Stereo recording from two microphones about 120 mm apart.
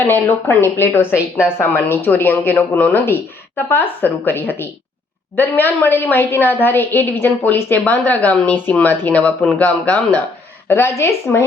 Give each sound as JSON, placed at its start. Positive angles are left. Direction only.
{"t": 0.1, "sound": "a woman's voice", "side_deg": 20}